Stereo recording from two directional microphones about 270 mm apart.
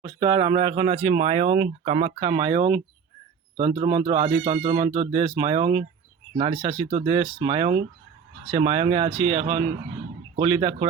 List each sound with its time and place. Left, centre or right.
0.0 s speech: centre